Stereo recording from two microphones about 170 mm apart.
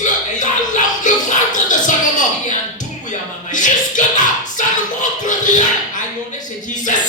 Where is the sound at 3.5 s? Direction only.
50° left (ahead or behind).